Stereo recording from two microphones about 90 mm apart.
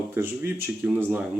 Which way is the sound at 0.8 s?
15° right (ahead or behind).